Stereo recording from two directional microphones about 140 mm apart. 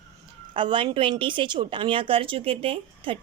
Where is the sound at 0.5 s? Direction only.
35° right (ahead or behind).